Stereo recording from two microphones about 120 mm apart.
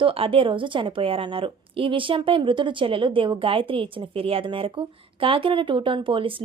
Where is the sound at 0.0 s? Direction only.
50° right (ahead or behind).